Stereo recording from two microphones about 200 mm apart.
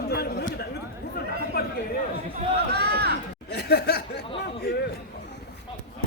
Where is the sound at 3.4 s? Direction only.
55° left (ahead or behind).